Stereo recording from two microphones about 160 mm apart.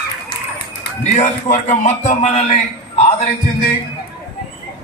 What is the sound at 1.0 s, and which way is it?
Speech, 50° left (ahead or behind).